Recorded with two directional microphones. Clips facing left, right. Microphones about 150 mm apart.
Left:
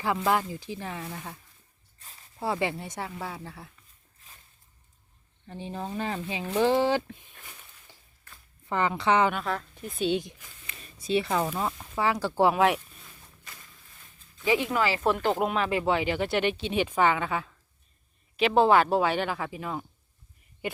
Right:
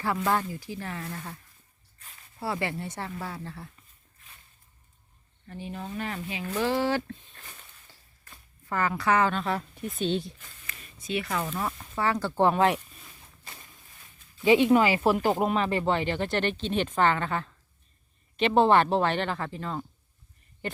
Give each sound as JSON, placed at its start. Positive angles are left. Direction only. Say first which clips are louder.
{"t": 0.0, "sound": "speech", "louder": "left 1 dB", "side_deg": 15}
{"t": 2.4, "sound": "speech", "louder": "left 2 dB", "side_deg": 15}
{"t": 5.5, "sound": "speech", "louder": "left 2 dB", "side_deg": 25}
{"t": 6.5, "sound": "a sound", "louder": "left 3 dB", "side_deg": 25}
{"t": 8.7, "sound": "speech", "louder": "left 1 dB", "side_deg": 20}
{"t": 9.4, "sound": "speech", "louder": "right 2 dB", "side_deg": -5}
{"t": 11.0, "sound": "speech", "louder": "left 4 dB", "side_deg": 30}
{"t": 11.5, "sound": "speech", "louder": "left 1 dB", "side_deg": 10}
{"t": 13.4, "sound": "a sound", "louder": "right 3 dB", "side_deg": -25}
{"t": 14.4, "sound": "speech", "louder": "right 6 dB", "side_deg": -20}
{"t": 15.0, "sound": "speech", "louder": "right 1 dB", "side_deg": -5}